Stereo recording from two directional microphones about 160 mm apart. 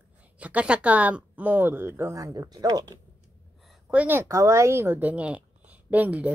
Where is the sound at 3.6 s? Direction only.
10° right (ahead or behind).